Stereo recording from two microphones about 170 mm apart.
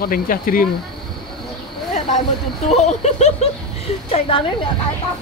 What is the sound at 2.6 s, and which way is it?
Speech, 40° left (ahead or behind).